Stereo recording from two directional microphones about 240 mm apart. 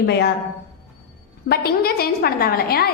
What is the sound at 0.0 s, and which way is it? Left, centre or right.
Speech, left.